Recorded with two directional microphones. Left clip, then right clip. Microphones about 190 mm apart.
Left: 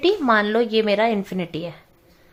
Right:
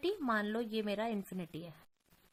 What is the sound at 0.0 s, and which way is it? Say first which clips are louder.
A woman's voice: left 17 dB; 35° right (ahead or behind).